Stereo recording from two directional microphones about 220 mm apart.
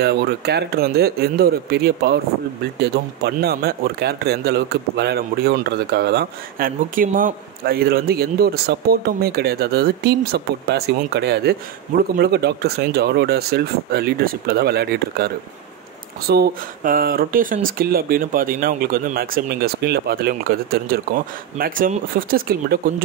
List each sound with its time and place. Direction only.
0.0 s speech: 50° right (ahead or behind)